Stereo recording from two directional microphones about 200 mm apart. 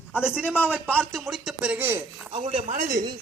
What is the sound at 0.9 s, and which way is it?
Speech, 5° left (ahead or behind).